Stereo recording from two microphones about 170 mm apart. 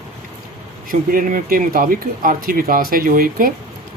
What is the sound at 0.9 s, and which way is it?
Speech, 55° right (ahead or behind).